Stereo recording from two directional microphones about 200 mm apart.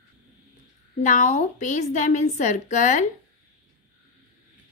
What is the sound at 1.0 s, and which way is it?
A woman's voice, 35° left (ahead or behind).